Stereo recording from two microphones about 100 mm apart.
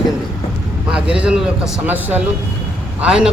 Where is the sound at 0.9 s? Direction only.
10° right (ahead or behind).